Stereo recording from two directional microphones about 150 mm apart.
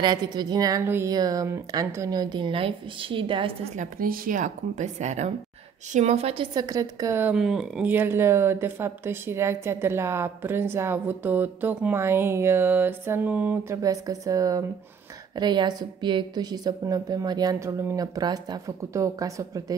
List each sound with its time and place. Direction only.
0.0 s a woman's voice: 30° right (ahead or behind)
3.7 s a woman's voice: 65° right (ahead or behind); by 7.3 s 15° right (ahead or behind)
7.3 s speech: 5° right (ahead or behind)
13.8 s a woman's voice: 25° right (ahead or behind)